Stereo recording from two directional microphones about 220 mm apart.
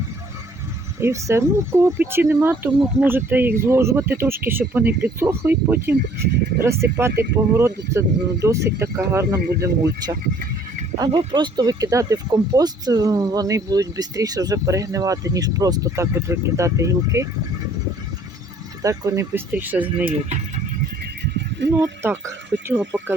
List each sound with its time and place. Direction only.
0.9 s speech: 10° right (ahead or behind)
18.8 s speech: 15° right (ahead or behind)
21.7 s speech: 10° right (ahead or behind)